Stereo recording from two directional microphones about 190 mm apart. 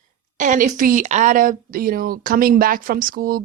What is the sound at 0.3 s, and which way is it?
A woman's voice, 40° right (ahead or behind).